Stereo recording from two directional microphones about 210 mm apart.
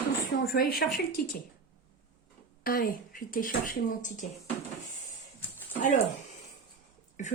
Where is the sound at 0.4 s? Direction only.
45° left (ahead or behind).